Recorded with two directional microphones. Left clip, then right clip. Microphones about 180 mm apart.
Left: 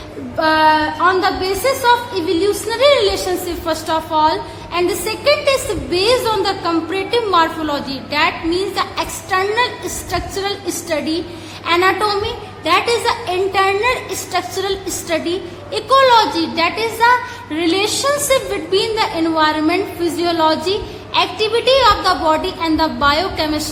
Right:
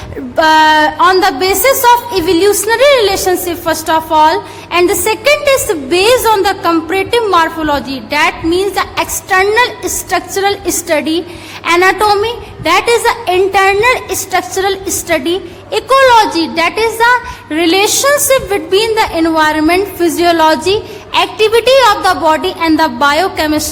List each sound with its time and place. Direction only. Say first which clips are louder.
0.3 s a woman's voice: right 6 dB; 45° right (ahead or behind)